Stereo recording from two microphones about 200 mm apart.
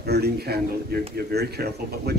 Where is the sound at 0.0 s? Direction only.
55° right (ahead or behind).